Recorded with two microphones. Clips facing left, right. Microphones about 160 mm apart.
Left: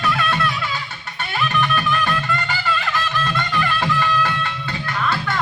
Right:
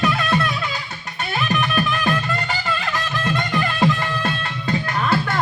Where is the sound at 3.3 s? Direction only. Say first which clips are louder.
Right 1 dB; 30° right (ahead or behind).